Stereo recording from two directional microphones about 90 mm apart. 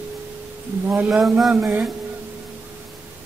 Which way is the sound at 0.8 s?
20° right (ahead or behind).